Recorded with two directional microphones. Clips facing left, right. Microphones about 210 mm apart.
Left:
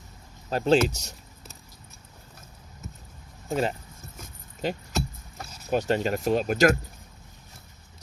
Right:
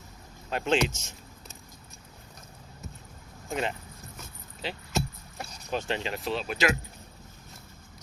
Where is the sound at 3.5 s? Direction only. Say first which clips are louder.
Left 5 dB; 40° left (ahead or behind).